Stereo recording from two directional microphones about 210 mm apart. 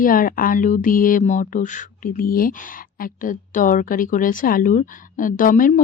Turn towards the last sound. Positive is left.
turn(degrees=40)  # may be behind; listen again after turning